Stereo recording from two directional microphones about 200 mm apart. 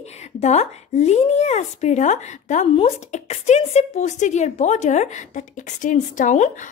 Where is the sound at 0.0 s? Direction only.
35° left (ahead or behind).